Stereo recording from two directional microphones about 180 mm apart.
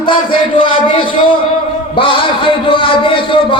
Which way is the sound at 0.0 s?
30° left (ahead or behind).